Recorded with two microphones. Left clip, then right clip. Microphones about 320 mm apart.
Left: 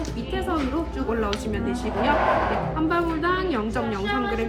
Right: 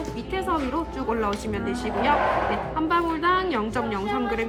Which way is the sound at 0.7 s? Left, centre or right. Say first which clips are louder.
Even; right.